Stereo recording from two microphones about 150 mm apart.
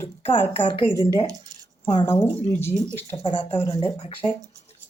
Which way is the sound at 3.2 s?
30° left (ahead or behind).